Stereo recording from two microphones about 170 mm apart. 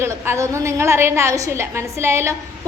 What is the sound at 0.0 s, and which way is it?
A woman's voice, 15° right (ahead or behind).